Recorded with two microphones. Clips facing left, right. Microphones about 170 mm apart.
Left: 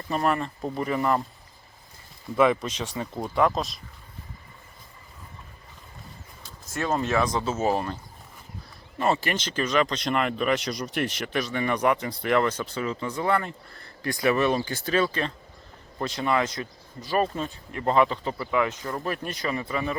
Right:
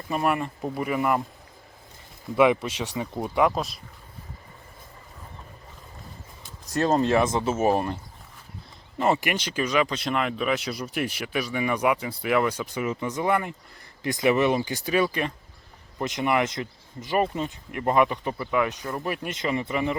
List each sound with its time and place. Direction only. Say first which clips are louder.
0.1 s speech: even; 10° right (ahead or behind)
2.3 s speech: right 1 dB; 10° right (ahead or behind)
6.7 s speech: right 5 dB; 35° right (ahead or behind)
7.2 s speech: right 2 dB; 20° right (ahead or behind)
9.0 s speech: right 1 dB; 15° right (ahead or behind)